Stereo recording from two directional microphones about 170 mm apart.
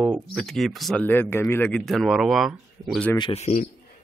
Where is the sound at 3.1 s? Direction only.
25° left (ahead or behind).